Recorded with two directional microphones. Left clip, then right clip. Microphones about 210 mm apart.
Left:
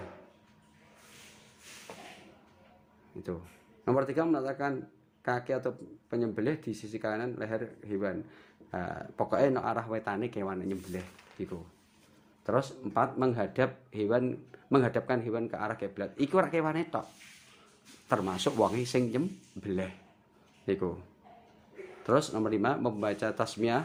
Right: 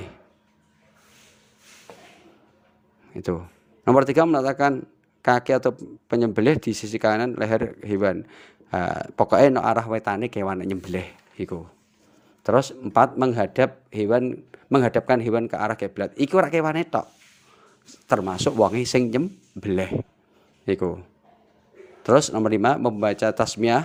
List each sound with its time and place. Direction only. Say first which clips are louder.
1.9 s a sound: right 3 dB; 35° right (ahead or behind)
3.8 s a man's voice: right 11 dB; 45° right (ahead or behind)
18.1 s speech: right 8 dB; 30° right (ahead or behind)
22.0 s speech: right 10 dB; 35° right (ahead or behind)